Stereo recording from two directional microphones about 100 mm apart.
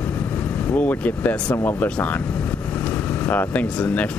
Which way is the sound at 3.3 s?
15° left (ahead or behind).